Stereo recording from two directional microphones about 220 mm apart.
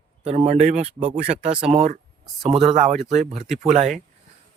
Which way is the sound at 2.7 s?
30° right (ahead or behind).